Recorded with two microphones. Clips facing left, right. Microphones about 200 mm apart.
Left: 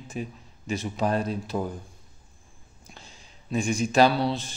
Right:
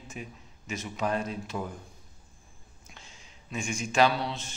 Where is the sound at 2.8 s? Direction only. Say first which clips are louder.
Left 4 dB; 35° left (ahead or behind).